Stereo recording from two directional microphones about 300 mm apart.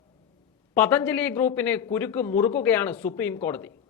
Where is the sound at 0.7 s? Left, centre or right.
Centre.